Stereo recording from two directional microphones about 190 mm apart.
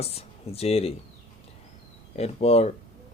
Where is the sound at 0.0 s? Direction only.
30° left (ahead or behind).